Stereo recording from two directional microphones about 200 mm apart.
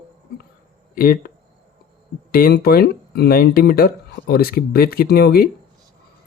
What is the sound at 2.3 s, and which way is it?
Speech, 50° left (ahead or behind).